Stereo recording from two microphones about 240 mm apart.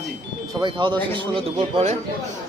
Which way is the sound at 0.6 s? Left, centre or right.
Centre.